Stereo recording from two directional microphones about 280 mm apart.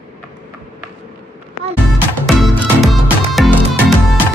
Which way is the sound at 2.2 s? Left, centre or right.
Centre.